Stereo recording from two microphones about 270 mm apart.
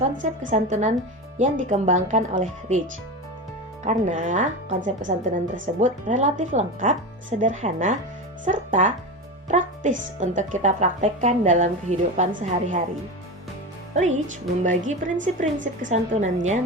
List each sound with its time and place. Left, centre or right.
0.2 s a woman's voice: right
3.8 s a woman's voice: right
13.9 s a woman's voice: right